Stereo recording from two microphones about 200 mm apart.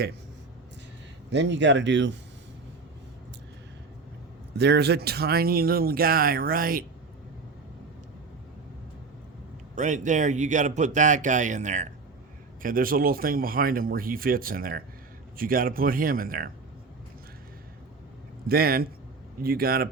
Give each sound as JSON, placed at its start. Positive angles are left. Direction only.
{"t": 1.3, "sound": "speech", "side_deg": -60}
{"t": 4.5, "sound": "speech", "side_deg": -55}
{"t": 9.7, "sound": "speech", "side_deg": -40}
{"t": 18.4, "sound": "speech", "side_deg": -50}